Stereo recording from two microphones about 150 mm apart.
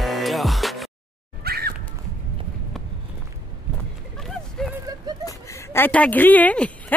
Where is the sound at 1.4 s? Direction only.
90° right.